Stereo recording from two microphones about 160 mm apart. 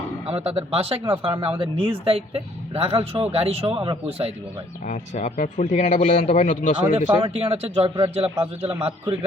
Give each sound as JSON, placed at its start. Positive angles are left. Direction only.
{"t": 0.3, "sound": "speech", "side_deg": -40}
{"t": 4.9, "sound": "speech", "side_deg": 50}
{"t": 7.2, "sound": "speech", "side_deg": -35}